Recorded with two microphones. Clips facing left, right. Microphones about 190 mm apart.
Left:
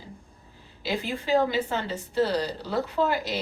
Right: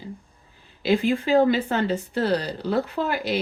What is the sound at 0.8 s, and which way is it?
Speech, 55° right (ahead or behind).